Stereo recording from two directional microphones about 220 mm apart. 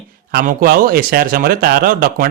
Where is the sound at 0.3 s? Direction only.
45° right (ahead or behind).